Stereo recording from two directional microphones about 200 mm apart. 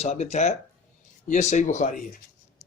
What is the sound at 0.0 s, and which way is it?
Speech, 35° left (ahead or behind).